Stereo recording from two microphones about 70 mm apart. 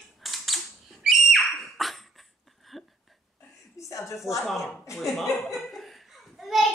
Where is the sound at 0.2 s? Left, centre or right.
Centre.